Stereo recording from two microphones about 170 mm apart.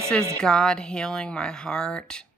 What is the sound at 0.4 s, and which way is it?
Speech, 5° left (ahead or behind).